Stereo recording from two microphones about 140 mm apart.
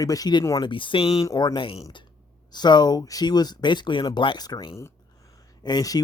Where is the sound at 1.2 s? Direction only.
25° left (ahead or behind).